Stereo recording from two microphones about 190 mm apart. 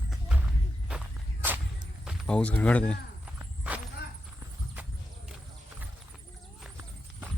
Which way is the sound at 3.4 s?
10° right (ahead or behind).